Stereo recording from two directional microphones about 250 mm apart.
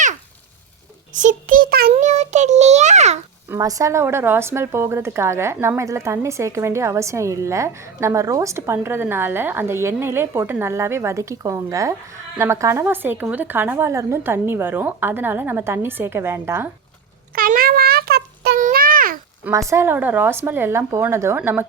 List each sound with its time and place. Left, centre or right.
1.1 s a child's voice: right
3.5 s speech: centre
17.3 s a sound: right
19.5 s speech: centre